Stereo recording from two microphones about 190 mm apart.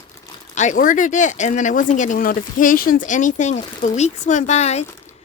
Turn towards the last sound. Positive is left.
turn(degrees=35)  # may be behind; listen again after turning